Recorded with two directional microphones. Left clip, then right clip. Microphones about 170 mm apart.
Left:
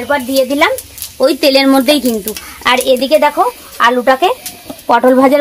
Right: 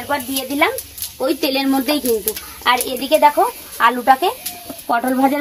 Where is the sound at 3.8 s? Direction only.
50° left (ahead or behind).